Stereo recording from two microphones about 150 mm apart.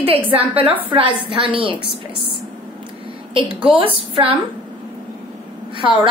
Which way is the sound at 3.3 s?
35° right (ahead or behind).